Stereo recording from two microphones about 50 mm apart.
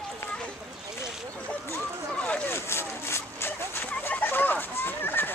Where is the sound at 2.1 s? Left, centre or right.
Left.